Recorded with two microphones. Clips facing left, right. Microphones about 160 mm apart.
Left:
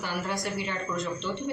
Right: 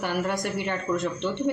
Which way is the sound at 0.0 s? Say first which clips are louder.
Right 5 dB; 60° right (ahead or behind).